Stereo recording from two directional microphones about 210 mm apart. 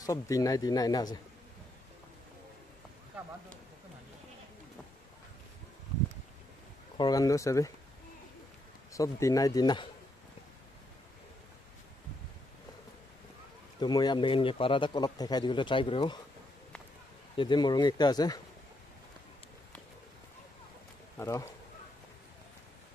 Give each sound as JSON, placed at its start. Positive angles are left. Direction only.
{"t": 0.0, "sound": "speech", "side_deg": 15}
{"t": 7.0, "sound": "speech", "side_deg": 15}
{"t": 8.9, "sound": "speech", "side_deg": 15}
{"t": 13.7, "sound": "a man's voice", "side_deg": 20}
{"t": 17.4, "sound": "a man's voice", "side_deg": 20}
{"t": 21.2, "sound": "speech", "side_deg": 15}